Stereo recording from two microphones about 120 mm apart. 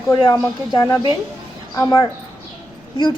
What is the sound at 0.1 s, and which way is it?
Speech, 35° left (ahead or behind).